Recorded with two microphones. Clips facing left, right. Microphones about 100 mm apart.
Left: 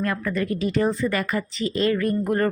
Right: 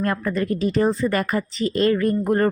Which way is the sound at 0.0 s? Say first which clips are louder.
Right 2 dB; 40° right (ahead or behind).